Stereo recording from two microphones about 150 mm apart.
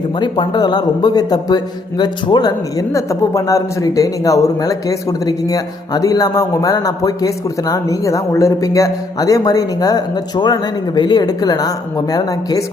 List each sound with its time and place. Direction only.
0.2 s a man's voice: 30° left (ahead or behind)